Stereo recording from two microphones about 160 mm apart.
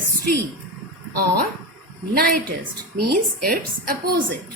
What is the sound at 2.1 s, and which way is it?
A woman's voice, 70° right (ahead or behind).